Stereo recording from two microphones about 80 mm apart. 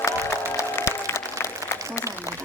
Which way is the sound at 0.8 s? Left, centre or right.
Left.